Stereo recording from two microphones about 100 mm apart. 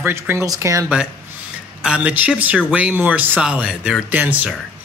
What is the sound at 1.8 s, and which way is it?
Speech, 15° right (ahead or behind).